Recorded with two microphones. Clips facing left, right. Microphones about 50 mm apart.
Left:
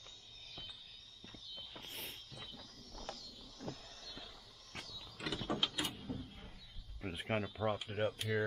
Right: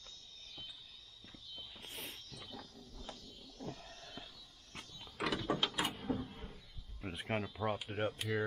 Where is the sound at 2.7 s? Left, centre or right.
Left.